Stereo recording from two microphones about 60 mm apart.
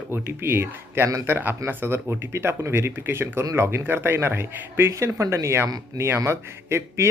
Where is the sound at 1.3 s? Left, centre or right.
Right.